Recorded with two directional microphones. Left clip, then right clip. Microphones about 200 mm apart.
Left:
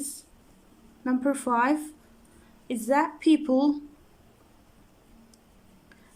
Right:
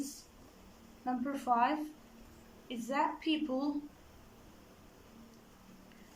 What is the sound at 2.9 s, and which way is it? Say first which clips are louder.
Speech: left 11 dB; 55° left (ahead or behind).